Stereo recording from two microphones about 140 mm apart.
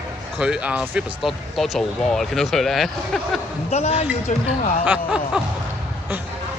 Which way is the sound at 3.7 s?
50° left (ahead or behind).